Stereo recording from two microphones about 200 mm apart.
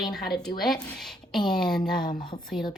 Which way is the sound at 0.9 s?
Centre (ahead or behind).